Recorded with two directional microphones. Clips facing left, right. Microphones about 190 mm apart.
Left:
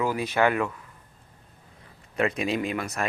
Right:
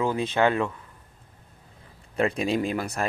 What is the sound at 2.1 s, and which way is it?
Speech, 30° right (ahead or behind).